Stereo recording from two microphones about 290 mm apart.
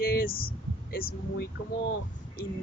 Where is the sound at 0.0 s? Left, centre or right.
Left.